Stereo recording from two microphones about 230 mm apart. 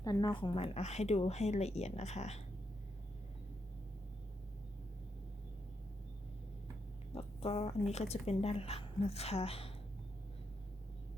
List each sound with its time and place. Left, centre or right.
0.0 s speech: centre
7.1 s speech: left